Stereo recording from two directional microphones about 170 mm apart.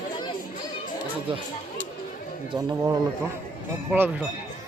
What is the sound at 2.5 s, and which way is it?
Speech, 25° right (ahead or behind).